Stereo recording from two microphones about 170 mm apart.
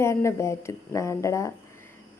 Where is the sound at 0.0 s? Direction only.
15° left (ahead or behind).